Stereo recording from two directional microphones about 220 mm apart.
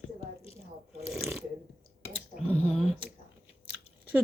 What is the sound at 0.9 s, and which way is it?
Speech, centre (ahead or behind).